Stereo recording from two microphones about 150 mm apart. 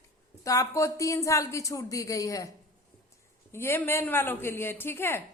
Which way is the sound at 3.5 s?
15° left (ahead or behind).